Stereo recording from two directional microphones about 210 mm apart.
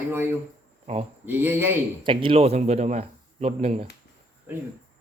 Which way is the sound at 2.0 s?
25° right (ahead or behind).